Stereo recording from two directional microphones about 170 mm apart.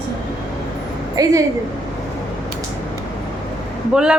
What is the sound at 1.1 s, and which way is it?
Speech, 20° right (ahead or behind).